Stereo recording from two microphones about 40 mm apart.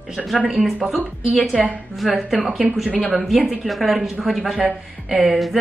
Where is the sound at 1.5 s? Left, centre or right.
Right.